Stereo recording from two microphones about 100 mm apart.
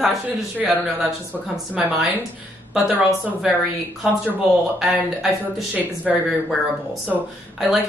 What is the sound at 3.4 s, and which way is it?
A woman's voice, 5° right (ahead or behind).